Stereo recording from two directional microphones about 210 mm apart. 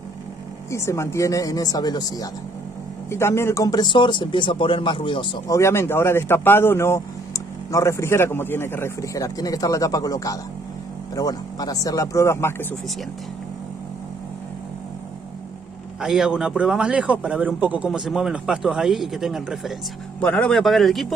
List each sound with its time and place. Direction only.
0.7 s speech: 15° left (ahead or behind)
16.0 s a man's voice: 5° right (ahead or behind)